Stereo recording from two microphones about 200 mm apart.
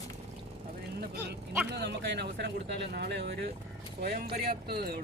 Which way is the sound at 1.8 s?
55° right (ahead or behind).